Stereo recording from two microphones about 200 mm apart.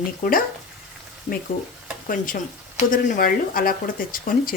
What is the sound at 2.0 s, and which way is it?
Speech, 45° left (ahead or behind).